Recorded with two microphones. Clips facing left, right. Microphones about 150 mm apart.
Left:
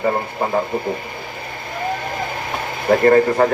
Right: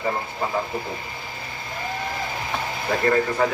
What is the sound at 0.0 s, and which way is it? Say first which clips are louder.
Speech: left 6 dB; 55° left (ahead or behind).